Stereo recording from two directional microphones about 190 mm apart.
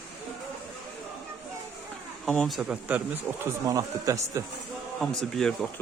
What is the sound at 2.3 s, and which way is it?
Speech, centre (ahead or behind).